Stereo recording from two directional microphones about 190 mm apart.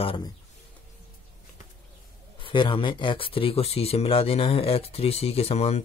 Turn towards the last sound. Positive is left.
turn(degrees=35)  # may be behind; listen again after turning